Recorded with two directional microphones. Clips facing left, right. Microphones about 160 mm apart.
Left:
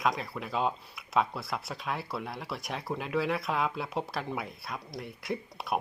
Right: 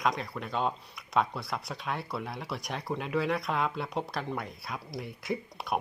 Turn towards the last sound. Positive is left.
turn(degrees=0)  # may be behind; listen again after turning